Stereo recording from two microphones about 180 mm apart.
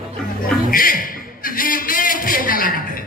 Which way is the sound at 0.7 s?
50° left (ahead or behind).